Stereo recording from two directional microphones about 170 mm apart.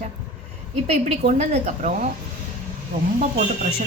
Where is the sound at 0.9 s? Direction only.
45° right (ahead or behind).